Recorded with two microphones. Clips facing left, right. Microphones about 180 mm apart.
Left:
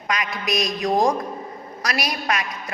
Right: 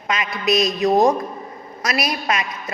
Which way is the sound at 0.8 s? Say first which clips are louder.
Right 3 dB; 5° right (ahead or behind).